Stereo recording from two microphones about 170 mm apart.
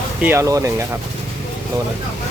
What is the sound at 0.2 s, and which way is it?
Speech, 15° right (ahead or behind).